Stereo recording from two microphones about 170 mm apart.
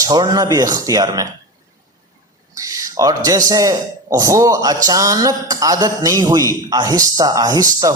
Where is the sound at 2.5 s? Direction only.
20° right (ahead or behind).